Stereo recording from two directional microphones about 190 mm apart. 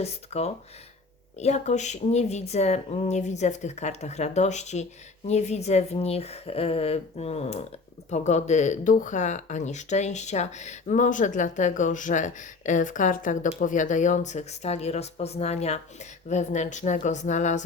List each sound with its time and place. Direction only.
0.0 s speech: 35° left (ahead or behind)